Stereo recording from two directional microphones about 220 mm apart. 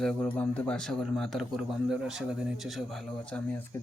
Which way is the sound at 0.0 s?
Centre (ahead or behind).